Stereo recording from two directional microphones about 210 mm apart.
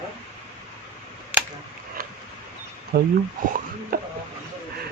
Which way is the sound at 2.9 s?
50° right (ahead or behind).